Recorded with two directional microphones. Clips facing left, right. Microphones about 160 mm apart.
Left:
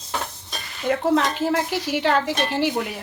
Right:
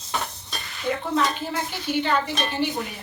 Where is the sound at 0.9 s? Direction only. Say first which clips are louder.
Left 4 dB; 80° left.